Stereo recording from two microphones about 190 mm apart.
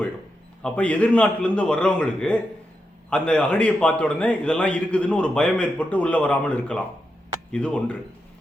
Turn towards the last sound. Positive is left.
turn(degrees=5)  # may be behind; listen again after turning